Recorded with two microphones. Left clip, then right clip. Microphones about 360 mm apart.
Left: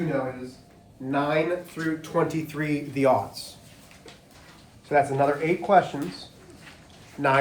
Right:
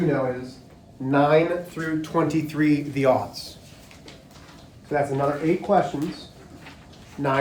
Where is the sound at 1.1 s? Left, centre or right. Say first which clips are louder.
Right 5 dB; centre.